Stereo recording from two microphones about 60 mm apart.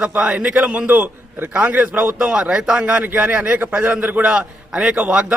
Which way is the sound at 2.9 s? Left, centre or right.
Right.